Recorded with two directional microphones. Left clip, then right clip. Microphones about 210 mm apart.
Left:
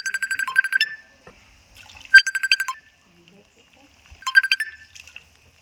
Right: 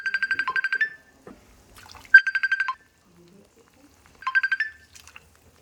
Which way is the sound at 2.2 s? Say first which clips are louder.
Left 2 dB; centre (ahead or behind).